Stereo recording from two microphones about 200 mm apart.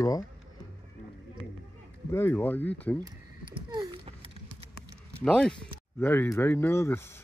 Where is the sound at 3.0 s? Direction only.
20° right (ahead or behind).